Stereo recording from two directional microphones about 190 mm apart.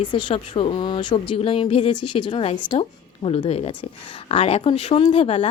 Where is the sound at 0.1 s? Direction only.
25° left (ahead or behind).